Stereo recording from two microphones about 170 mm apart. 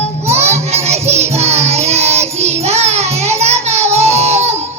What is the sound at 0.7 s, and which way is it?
Music, 40° right (ahead or behind).